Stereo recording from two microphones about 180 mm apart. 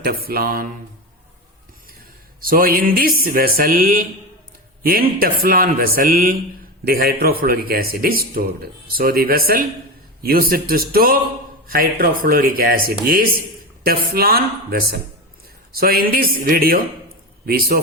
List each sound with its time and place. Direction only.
0.0 s speech: 55° right (ahead or behind)
2.4 s a man's voice: 50° right (ahead or behind)